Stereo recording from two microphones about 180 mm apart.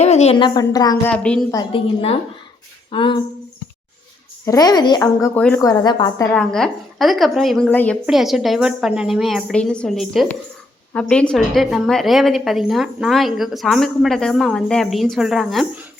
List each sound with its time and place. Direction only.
0.0 s speech: 35° left (ahead or behind); by 0.9 s 20° left (ahead or behind)
1.0 s a woman's voice: 5° left (ahead or behind)
1.5 s speech: 20° left (ahead or behind)
2.9 s speech: 30° left (ahead or behind)
4.4 s speech: 20° left (ahead or behind)
4.9 s speech: 10° left (ahead or behind)
5.5 s speech: 20° left (ahead or behind)
6.3 s a woman's voice: 5° left (ahead or behind)